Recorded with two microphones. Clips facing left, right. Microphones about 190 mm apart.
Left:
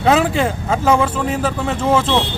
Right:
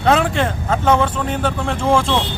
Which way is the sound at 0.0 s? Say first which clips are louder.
Left 1 dB; 5° left (ahead or behind).